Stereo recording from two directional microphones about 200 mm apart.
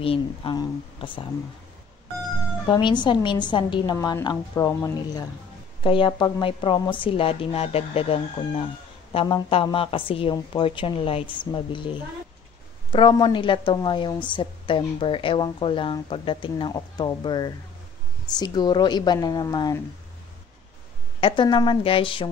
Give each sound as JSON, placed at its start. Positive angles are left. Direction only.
{"t": 0.0, "sound": "a woman's voice", "side_deg": 25}
{"t": 2.6, "sound": "a woman's voice", "side_deg": 20}
{"t": 5.8, "sound": "a woman's voice", "side_deg": 25}
{"t": 21.2, "sound": "a woman's voice", "side_deg": 25}